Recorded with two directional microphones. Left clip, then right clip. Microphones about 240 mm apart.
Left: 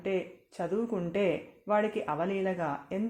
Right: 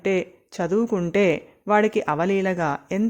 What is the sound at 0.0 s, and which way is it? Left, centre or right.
Speech, right.